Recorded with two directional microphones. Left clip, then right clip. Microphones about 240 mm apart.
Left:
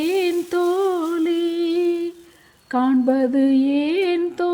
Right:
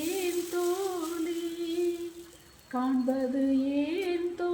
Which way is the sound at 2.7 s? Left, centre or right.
Left.